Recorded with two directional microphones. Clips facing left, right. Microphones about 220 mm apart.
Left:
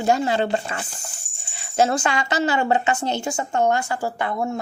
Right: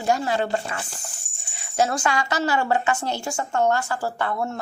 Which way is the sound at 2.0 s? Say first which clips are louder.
Left 1 dB; 20° left (ahead or behind).